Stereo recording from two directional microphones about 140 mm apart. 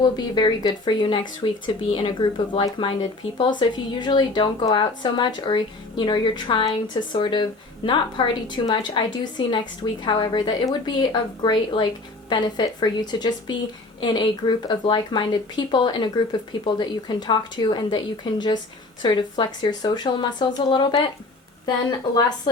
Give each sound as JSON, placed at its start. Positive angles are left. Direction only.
{"t": 0.0, "sound": "a woman's voice", "side_deg": 30}